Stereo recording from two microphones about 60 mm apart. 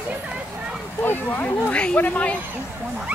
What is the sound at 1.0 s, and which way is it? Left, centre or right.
Speech, left.